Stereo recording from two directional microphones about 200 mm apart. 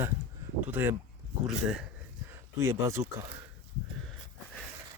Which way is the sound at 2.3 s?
15° right (ahead or behind).